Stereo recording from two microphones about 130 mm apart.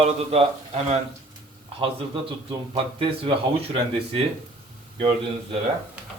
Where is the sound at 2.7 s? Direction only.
45° right (ahead or behind).